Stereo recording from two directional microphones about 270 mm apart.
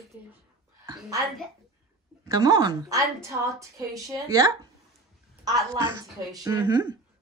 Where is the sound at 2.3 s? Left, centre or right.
Centre.